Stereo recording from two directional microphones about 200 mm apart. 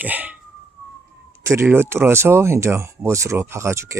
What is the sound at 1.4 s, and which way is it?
Speech, 10° right (ahead or behind).